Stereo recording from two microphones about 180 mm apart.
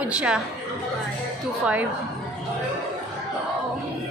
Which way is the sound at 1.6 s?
10° right (ahead or behind).